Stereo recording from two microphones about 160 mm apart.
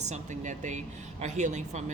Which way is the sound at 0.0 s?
50° right (ahead or behind).